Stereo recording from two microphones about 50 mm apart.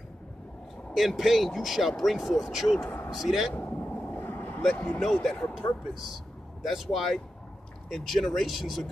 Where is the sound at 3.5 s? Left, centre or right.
Left.